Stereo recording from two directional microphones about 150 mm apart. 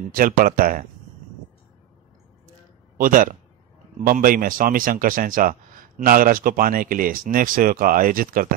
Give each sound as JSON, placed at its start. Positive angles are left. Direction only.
{"t": 0.1, "sound": "speech", "side_deg": -70}
{"t": 3.0, "sound": "a man's voice", "side_deg": -65}